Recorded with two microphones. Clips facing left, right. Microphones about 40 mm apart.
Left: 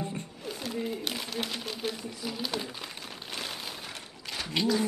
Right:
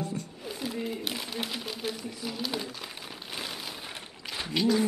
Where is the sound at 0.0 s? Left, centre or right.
Left.